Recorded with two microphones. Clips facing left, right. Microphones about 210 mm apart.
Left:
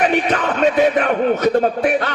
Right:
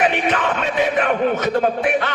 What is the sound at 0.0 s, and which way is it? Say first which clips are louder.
A man's voice: left 2 dB; 40° left (ahead or behind).